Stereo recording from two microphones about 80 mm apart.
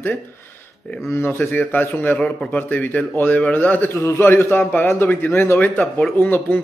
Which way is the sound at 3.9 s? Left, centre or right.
Left.